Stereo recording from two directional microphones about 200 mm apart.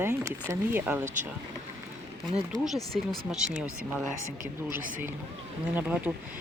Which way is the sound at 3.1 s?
Centre (ahead or behind).